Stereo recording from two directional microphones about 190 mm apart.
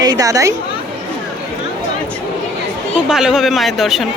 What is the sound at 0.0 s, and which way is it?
Speech, 20° right (ahead or behind).